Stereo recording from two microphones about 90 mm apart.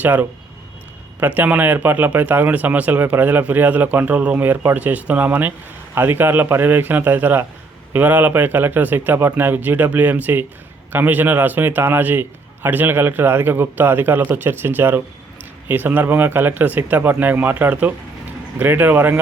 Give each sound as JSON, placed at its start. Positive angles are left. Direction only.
{"t": 0.0, "sound": "speech", "side_deg": -20}
{"t": 1.4, "sound": "speech", "side_deg": -20}